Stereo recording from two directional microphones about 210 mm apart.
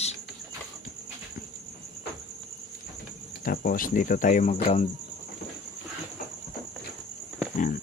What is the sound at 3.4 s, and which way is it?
Speech, 40° left (ahead or behind).